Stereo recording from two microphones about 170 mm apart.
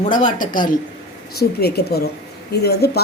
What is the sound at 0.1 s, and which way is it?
Speech, 50° left (ahead or behind).